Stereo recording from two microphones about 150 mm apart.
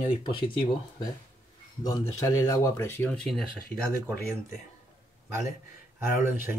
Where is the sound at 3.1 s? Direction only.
5° left (ahead or behind).